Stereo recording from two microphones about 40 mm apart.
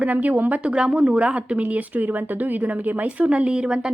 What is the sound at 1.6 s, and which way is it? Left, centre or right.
Speech, right.